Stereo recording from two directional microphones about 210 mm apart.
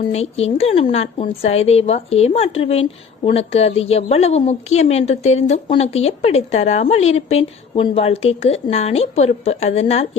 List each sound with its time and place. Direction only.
0.1 s a woman's voice: 30° left (ahead or behind)